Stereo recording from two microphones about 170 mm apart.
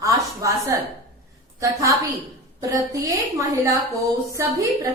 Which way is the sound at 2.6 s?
20° right (ahead or behind).